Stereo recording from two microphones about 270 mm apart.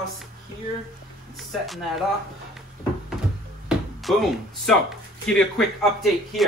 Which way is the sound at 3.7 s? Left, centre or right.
Centre.